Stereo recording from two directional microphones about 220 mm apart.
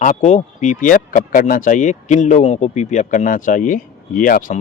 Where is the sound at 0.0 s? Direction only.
35° left (ahead or behind).